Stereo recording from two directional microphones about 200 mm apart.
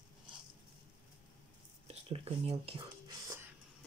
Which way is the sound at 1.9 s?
30° right (ahead or behind).